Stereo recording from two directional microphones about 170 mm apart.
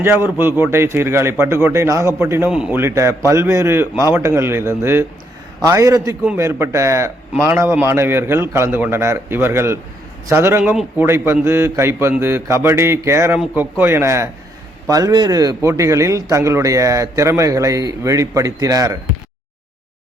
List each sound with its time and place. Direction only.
0.3 s a man's voice: 15° right (ahead or behind)